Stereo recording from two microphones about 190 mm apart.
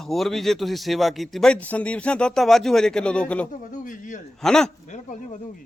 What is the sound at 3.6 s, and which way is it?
Speech, 40° left (ahead or behind).